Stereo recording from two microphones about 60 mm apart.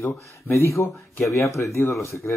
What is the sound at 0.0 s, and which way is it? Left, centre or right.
Speech, left.